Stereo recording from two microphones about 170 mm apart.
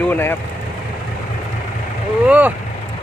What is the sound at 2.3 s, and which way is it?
Speech, 10° right (ahead or behind).